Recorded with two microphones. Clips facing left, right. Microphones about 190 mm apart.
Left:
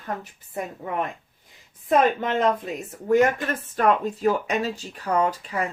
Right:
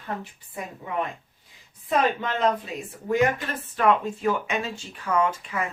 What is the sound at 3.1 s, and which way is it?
Speech, 45° left (ahead or behind).